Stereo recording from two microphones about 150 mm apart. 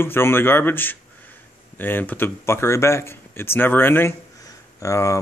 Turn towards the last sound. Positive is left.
turn(degrees=20)  # may be behind; listen again after turning